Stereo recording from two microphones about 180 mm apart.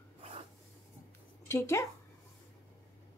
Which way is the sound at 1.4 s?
15° left (ahead or behind).